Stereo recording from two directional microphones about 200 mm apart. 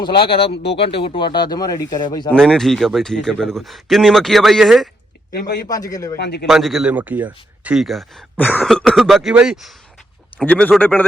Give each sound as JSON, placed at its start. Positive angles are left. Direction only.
{"t": 0.3, "sound": "speech", "side_deg": 30}
{"t": 0.5, "sound": "a man's voice", "side_deg": 55}
{"t": 0.8, "sound": "speech", "side_deg": 25}
{"t": 2.3, "sound": "a man's voice", "side_deg": 5}
{"t": 5.6, "sound": "speech", "side_deg": 15}
{"t": 6.1, "sound": "a man's voice", "side_deg": 55}
{"t": 6.5, "sound": "a man's voice", "side_deg": 0}